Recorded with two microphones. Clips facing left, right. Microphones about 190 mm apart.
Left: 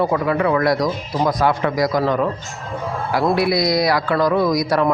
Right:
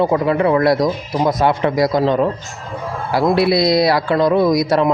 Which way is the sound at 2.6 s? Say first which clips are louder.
Left 1 dB; centre (ahead or behind).